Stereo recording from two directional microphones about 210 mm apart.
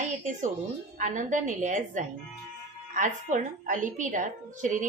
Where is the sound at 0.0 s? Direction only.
35° right (ahead or behind).